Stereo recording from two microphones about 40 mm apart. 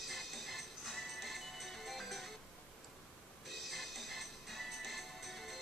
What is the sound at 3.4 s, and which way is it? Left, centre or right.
Music, centre.